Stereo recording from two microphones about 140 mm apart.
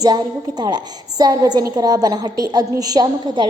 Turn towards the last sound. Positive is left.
turn(degrees=-30)  # may be behind; listen again after turning